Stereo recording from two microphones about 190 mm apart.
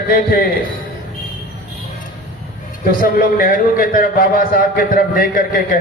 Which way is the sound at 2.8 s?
50° left (ahead or behind).